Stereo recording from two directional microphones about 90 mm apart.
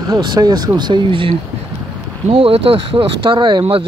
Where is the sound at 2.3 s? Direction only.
90° right; by 3.8 s 70° right (ahead or behind).